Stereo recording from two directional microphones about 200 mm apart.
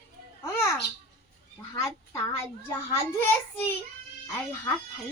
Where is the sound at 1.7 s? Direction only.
15° left (ahead or behind).